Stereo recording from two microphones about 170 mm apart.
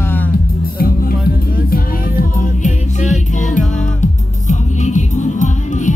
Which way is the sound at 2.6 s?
45° left (ahead or behind).